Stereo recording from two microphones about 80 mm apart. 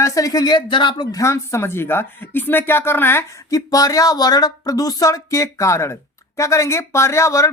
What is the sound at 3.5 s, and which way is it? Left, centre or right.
Speech, left.